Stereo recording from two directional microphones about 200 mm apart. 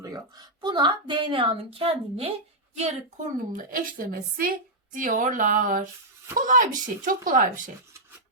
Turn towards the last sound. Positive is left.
turn(degrees=-40)  # may be behind; listen again after turning